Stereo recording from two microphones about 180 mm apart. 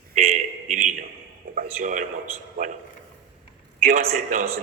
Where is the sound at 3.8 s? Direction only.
40° right (ahead or behind).